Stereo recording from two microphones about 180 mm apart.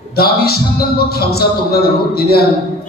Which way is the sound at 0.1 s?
60° left (ahead or behind).